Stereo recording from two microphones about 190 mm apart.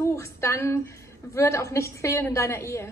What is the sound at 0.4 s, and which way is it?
A woman's voice, 15° left (ahead or behind).